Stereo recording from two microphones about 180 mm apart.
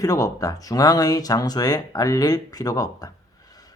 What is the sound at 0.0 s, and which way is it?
Speech, 20° left (ahead or behind).